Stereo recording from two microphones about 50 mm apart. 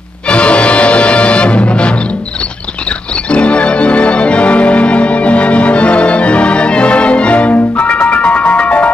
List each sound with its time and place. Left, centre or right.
0.3 s music: left
3.3 s music: left